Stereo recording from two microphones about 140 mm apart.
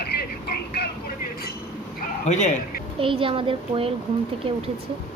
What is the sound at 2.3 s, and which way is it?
Speech, 60° left (ahead or behind).